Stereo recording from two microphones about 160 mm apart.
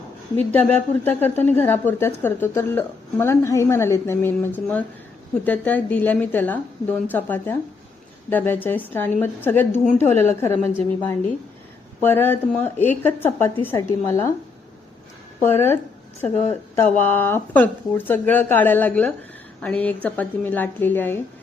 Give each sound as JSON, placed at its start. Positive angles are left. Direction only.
{"t": 0.3, "sound": "a woman's voice", "side_deg": 10}
{"t": 15.4, "sound": "a woman's voice", "side_deg": 15}
{"t": 16.3, "sound": "a woman's voice", "side_deg": 40}
{"t": 16.7, "sound": "a woman's voice", "side_deg": 15}